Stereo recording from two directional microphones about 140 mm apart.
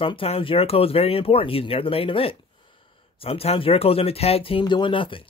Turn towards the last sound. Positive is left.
turn(degrees=35)  # may be behind; listen again after turning